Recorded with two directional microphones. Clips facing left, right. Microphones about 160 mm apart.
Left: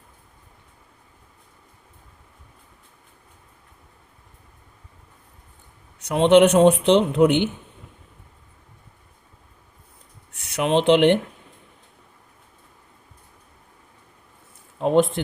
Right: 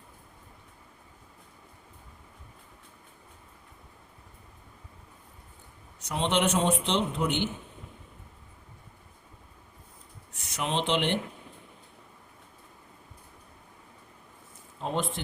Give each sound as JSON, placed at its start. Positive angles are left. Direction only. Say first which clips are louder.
{"t": 6.0, "sound": "speech", "louder": "left 13 dB", "side_deg": 60}
{"t": 10.3, "sound": "speech", "louder": "left 10 dB", "side_deg": 65}
{"t": 14.8, "sound": "a sound", "louder": "left 13 dB", "side_deg": 65}